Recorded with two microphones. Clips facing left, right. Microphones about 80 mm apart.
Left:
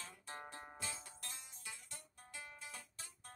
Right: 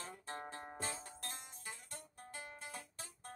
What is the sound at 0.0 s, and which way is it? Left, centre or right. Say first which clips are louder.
Music: right 4 dB; right.